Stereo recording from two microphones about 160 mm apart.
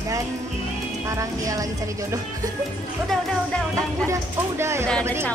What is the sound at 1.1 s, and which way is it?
Speech, 20° right (ahead or behind).